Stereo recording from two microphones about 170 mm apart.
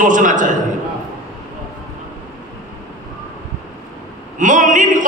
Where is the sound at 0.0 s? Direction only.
50° right (ahead or behind).